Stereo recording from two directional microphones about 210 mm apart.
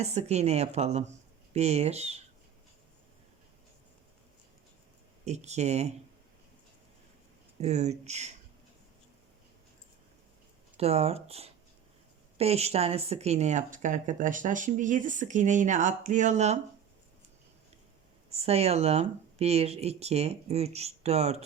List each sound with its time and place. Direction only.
0.0 s speech: 30° right (ahead or behind)
5.2 s speech: 30° right (ahead or behind)
7.6 s speech: 30° right (ahead or behind)
10.8 s speech: 30° right (ahead or behind)
18.3 s speech: 30° right (ahead or behind)